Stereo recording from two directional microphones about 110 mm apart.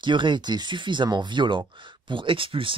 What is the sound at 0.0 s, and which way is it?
Speech, 45° right (ahead or behind).